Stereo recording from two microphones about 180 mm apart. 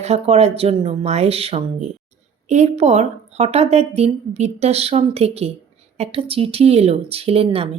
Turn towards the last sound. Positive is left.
turn(degrees=-30)  # may be behind; listen again after turning